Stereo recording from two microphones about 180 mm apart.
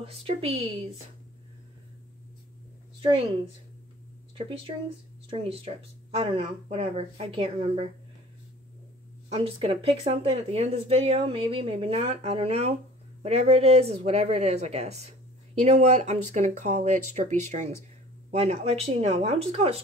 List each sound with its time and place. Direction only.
0.0 s speech: 35° right (ahead or behind)
3.0 s a woman's voice: 30° right (ahead or behind)
5.3 s speech: 30° right (ahead or behind)
9.3 s speech: 35° right (ahead or behind)